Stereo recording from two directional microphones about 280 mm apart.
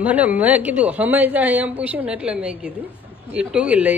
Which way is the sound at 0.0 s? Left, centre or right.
Centre.